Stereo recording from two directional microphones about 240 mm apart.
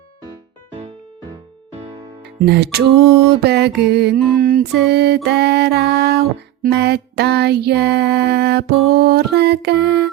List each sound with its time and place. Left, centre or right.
2.4 s music: right